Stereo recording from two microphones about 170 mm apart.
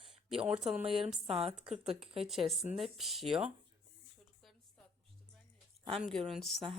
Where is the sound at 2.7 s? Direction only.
Centre (ahead or behind).